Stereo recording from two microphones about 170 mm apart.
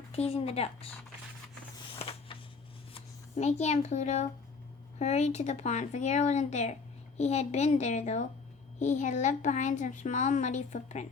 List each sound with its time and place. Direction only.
0.1 s a woman's voice: 35° left (ahead or behind)
2.0 s a sound: 35° left (ahead or behind)
2.9 s a child's voice: 40° left (ahead or behind)